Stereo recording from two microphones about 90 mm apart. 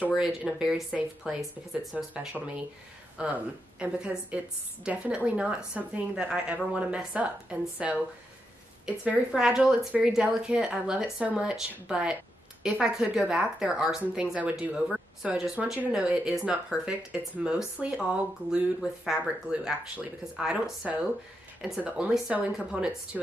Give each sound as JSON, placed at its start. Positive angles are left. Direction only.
{"t": 0.4, "sound": "speech", "side_deg": -5}
{"t": 9.0, "sound": "speech", "side_deg": -10}